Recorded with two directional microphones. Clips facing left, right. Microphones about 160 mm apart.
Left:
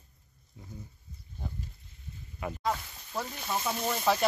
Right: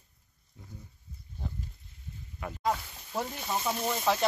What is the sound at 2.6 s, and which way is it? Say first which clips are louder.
Speech: right 3 dB; 15° right (ahead or behind).